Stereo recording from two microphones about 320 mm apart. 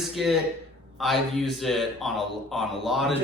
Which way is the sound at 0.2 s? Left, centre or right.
Centre.